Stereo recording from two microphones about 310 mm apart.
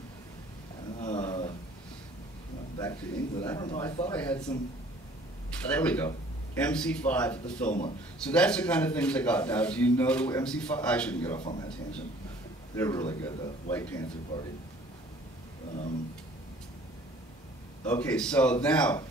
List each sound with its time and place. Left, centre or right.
0.9 s a sound: left
2.8 s speech: centre
4.2 s a man's voice: centre
5.7 s a man's voice: centre
11.3 s speech: centre
12.7 s speech: centre
17.8 s a man's voice: centre